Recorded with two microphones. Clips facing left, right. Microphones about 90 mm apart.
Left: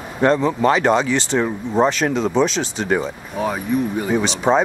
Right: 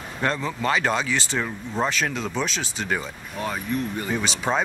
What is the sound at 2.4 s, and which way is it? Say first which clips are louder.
Speech: left 9 dB; 5° right (ahead or behind).